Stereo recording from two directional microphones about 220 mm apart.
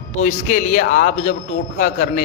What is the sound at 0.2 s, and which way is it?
A man's voice, 35° left (ahead or behind).